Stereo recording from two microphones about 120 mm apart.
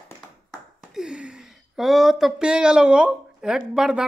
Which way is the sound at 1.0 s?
5° right (ahead or behind).